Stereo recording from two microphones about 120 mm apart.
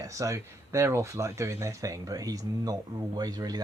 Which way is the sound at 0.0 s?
25° right (ahead or behind).